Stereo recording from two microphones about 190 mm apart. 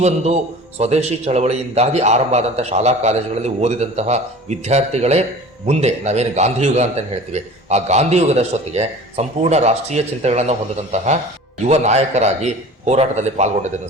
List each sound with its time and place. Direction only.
0.8 s a man's voice: 35° right (ahead or behind)